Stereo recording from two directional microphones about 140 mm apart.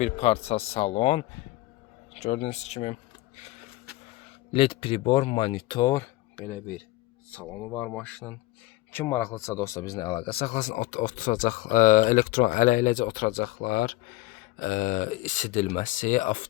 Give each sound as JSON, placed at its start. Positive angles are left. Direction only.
{"t": 0.0, "sound": "a man's voice", "side_deg": 50}
{"t": 4.5, "sound": "speech", "side_deg": 40}
{"t": 7.3, "sound": "speech", "side_deg": 10}
{"t": 14.6, "sound": "speech", "side_deg": 70}